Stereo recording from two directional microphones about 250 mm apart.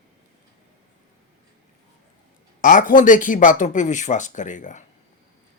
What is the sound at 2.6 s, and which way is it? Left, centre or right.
Speech, left.